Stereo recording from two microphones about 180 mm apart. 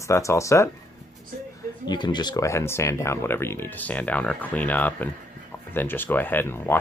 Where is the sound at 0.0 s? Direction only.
15° left (ahead or behind).